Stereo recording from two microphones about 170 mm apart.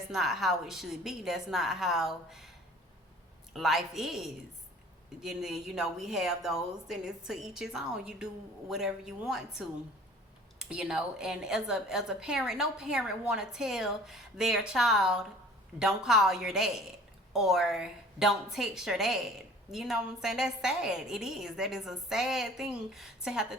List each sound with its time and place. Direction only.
0.1 s a woman's voice: centre (ahead or behind)
3.5 s a woman's voice: centre (ahead or behind)